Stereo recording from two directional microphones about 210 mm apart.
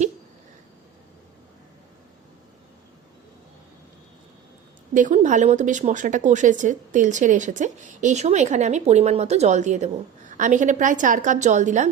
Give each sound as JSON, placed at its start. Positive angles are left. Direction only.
{"t": 4.9, "sound": "speech", "side_deg": -35}